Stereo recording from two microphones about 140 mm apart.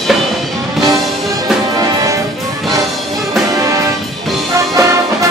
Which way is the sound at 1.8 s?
25° right (ahead or behind).